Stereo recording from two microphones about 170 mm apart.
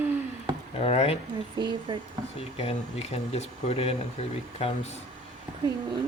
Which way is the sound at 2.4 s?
35° left (ahead or behind).